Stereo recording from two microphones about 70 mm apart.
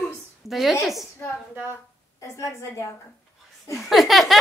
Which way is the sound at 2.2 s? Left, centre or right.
Left.